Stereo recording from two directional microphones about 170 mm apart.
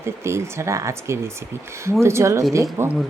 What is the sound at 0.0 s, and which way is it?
Speech, 15° right (ahead or behind).